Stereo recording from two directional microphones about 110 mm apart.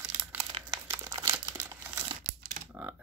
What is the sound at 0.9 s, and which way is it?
Crumpling, 30° right (ahead or behind).